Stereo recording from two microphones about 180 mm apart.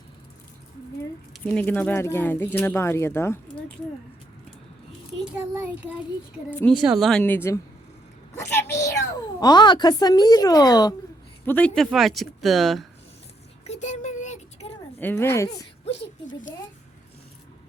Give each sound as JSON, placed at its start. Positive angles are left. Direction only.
{"t": 1.3, "sound": "speech", "side_deg": 5}
{"t": 5.2, "sound": "a child's voice", "side_deg": -5}
{"t": 11.4, "sound": "speech", "side_deg": 10}
{"t": 13.7, "sound": "child singing", "side_deg": 40}
{"t": 14.9, "sound": "speech", "side_deg": 15}
{"t": 15.9, "sound": "a woman's voice", "side_deg": 45}